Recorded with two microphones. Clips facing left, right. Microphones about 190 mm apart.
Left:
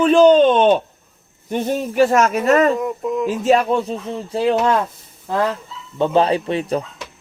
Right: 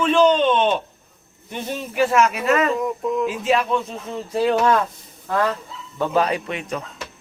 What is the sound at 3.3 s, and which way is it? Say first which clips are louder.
Speech: left 9 dB; 40° left (ahead or behind).